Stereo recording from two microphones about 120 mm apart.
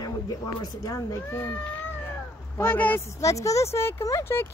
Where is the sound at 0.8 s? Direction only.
25° left (ahead or behind).